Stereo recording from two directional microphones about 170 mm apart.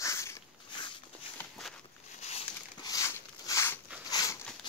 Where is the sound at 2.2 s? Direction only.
40° left (ahead or behind).